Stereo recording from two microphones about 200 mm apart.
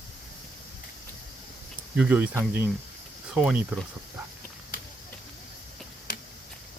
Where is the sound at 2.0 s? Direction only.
5° right (ahead or behind).